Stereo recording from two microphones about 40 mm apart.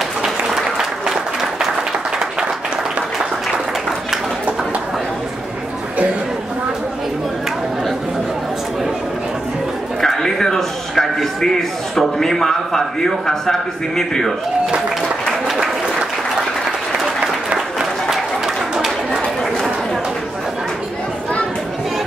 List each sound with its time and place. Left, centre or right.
0.2 s applause: centre
10.0 s a sound: centre
15.4 s applause: centre
17.2 s applause: centre